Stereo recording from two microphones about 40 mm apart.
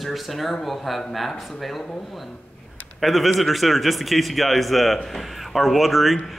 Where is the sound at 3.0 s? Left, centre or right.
Centre.